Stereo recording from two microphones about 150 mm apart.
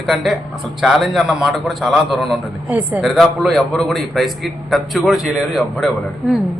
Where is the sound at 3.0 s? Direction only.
Centre (ahead or behind).